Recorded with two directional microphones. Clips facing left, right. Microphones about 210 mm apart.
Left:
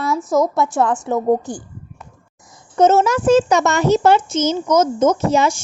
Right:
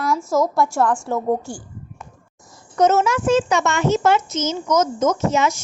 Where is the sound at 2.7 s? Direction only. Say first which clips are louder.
Left 3 dB; 30° left (ahead or behind).